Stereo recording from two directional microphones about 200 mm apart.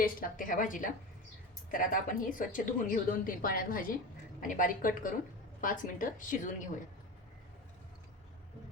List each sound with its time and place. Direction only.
0.0 s a woman's voice: 45° left (ahead or behind)